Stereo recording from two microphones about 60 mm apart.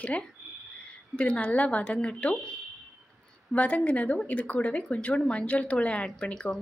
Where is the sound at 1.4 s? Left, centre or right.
Left.